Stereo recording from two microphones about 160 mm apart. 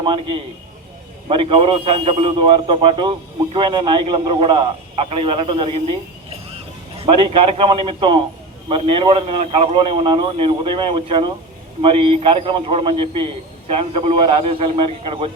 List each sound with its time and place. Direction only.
0.0 s a man's voice: 35° right (ahead or behind)